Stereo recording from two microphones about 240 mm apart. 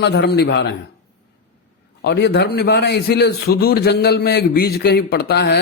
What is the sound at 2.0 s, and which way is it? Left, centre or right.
A man's voice, left.